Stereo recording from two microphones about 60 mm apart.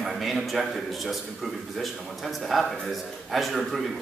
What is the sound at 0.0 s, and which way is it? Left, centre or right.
A man's voice, centre.